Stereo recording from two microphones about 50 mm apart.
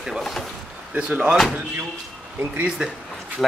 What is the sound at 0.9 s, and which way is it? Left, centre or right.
Speech, right.